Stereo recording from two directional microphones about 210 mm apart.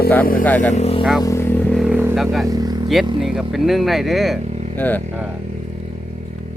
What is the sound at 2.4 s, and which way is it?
Vehicle, 15° right (ahead or behind).